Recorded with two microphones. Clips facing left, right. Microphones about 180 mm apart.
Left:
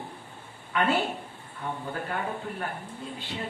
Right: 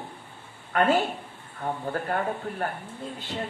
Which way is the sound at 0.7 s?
45° right (ahead or behind).